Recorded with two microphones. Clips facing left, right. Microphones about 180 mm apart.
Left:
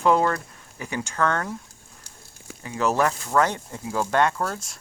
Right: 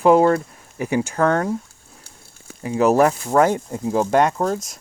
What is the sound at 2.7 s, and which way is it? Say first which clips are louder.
Speech: right 7 dB; 40° right (ahead or behind).